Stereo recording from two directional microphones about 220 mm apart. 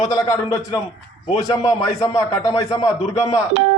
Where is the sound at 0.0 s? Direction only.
15° left (ahead or behind).